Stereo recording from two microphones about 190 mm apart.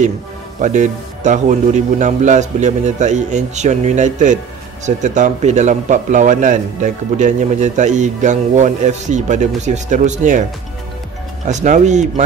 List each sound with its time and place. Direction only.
0.6 s a man's voice: 40° right (ahead or behind)
11.4 s a man's voice: 40° right (ahead or behind)